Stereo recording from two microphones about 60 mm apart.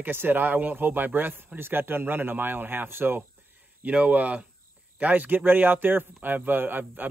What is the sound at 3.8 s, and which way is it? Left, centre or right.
Speech, right.